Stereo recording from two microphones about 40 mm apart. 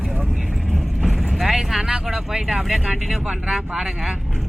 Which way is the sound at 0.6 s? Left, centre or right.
Centre.